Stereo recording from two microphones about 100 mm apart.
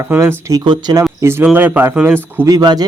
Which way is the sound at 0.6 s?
50° right (ahead or behind).